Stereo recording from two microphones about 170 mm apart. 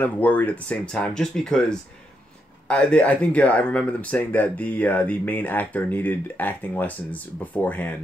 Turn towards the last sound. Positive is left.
turn(degrees=10)  # may be behind; listen again after turning